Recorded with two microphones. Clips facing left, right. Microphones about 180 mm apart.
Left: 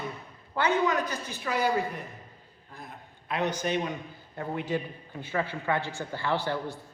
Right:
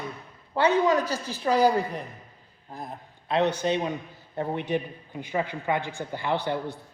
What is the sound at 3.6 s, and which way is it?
A man's voice, 20° right (ahead or behind).